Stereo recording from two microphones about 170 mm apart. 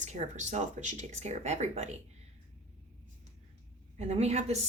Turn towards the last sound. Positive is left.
turn(degrees=-40)  # may be behind; listen again after turning